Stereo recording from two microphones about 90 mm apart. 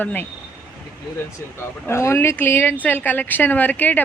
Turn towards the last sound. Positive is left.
turn(degrees=20)  # may be behind; listen again after turning